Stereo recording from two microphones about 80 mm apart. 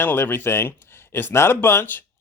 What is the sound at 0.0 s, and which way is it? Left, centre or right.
Speech, left.